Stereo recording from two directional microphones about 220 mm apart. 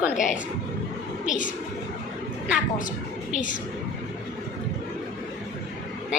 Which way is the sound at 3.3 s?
35° left (ahead or behind).